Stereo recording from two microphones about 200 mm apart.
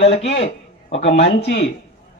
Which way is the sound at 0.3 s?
30° left (ahead or behind).